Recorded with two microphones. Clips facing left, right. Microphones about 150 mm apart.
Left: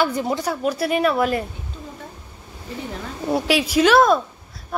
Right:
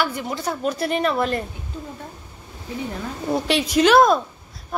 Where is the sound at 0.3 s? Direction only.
10° left (ahead or behind).